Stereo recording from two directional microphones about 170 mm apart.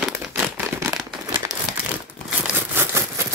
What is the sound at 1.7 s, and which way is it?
Crumpling, centre (ahead or behind).